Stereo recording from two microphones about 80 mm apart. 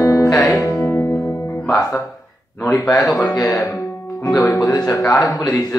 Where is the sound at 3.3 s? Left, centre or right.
Left.